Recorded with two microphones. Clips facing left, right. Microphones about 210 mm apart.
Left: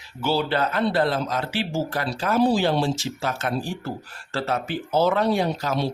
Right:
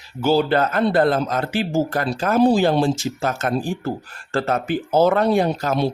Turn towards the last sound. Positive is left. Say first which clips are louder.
# right 4 dB
turn(degrees=-50)  # may be behind; listen again after turning